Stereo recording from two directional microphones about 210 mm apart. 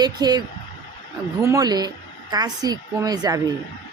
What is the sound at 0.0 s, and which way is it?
A woman's voice, 20° right (ahead or behind).